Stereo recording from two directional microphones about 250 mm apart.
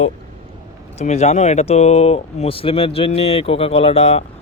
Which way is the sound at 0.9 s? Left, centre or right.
Left.